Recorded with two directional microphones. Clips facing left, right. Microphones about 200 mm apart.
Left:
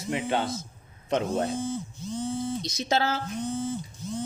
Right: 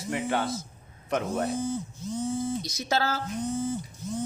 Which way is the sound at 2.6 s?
20° left (ahead or behind).